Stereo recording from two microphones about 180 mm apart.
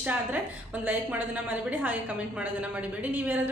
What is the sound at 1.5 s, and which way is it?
Speech, 10° right (ahead or behind).